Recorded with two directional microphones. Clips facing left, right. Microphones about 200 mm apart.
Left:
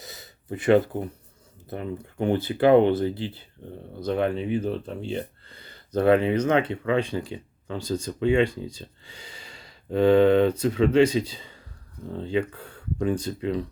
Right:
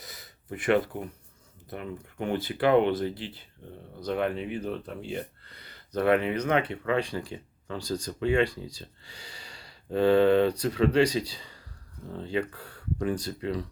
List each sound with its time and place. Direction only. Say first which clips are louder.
0.0 s gasp: left 4 dB; 25° left (ahead or behind)
1.7 s speech: left 5 dB; 30° left (ahead or behind)